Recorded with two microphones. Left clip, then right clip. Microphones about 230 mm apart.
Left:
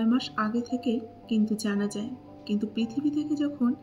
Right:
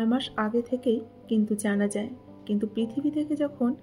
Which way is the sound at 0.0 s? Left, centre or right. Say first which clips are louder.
Even; right.